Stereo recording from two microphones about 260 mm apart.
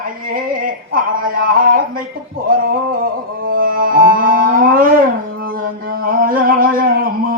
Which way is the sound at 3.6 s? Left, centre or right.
Right.